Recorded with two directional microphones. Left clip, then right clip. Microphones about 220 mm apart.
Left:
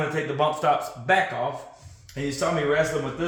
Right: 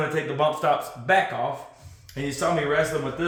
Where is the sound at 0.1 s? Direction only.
Centre (ahead or behind).